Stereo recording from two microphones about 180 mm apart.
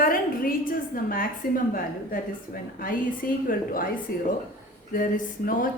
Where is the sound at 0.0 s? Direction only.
50° left (ahead or behind).